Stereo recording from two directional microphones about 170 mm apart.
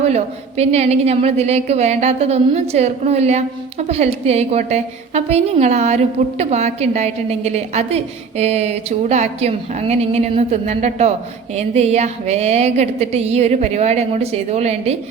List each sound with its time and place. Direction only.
0.0 s a woman's voice: 40° right (ahead or behind)